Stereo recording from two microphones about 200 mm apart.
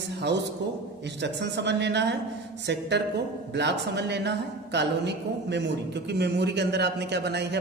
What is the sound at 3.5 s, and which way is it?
A woman's voice, 60° right (ahead or behind).